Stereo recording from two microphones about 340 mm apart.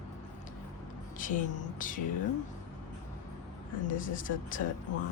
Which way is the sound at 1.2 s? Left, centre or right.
Left.